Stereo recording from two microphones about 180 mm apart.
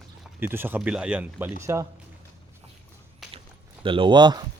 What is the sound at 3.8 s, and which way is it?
Speech, 30° right (ahead or behind).